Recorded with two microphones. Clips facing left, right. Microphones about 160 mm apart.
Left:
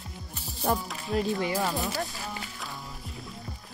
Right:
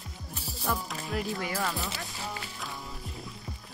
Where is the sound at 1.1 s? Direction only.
25° left (ahead or behind).